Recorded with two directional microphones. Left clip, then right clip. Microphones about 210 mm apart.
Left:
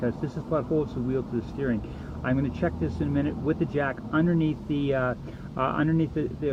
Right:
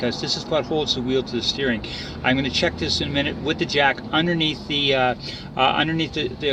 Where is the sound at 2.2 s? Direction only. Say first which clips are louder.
Right 8 dB; 15° left (ahead or behind).